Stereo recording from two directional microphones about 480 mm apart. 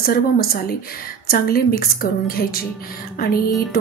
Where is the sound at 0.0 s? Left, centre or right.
Centre.